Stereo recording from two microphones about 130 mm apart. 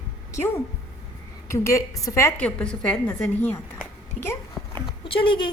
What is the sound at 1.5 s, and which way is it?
Speech, 20° left (ahead or behind).